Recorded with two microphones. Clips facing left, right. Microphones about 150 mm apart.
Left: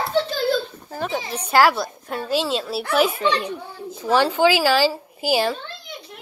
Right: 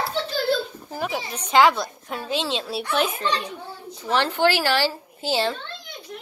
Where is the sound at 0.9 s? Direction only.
5° right (ahead or behind).